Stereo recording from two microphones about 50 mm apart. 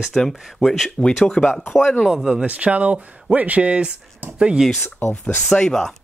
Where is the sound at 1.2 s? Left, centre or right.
Centre.